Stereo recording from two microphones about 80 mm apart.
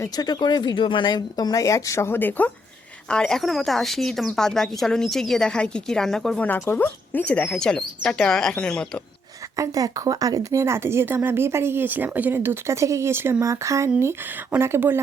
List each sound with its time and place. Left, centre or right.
0.2 s speech: left
3.1 s speech: centre
6.4 s speech: left
7.5 s speech: centre
9.6 s speech: right
13.4 s speech: right